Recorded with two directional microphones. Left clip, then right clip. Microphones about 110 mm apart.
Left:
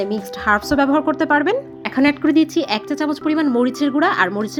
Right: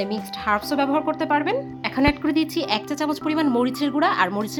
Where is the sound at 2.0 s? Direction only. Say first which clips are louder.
Left 6 dB; 30° left (ahead or behind).